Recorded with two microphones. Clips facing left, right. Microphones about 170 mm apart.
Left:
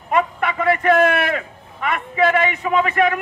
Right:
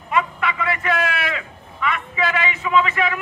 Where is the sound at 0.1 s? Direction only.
50° left (ahead or behind).